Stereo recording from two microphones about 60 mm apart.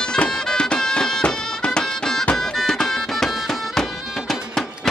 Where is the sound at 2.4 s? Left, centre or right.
Centre.